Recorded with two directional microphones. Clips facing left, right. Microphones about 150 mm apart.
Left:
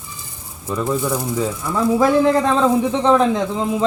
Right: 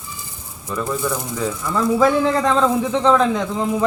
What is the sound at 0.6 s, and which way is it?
A man's voice, 20° left (ahead or behind).